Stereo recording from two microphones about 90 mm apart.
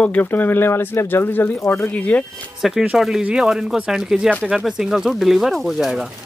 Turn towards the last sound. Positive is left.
turn(degrees=0)  # may be behind; listen again after turning